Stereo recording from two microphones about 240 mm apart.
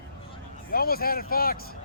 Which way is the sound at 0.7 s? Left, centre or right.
Left.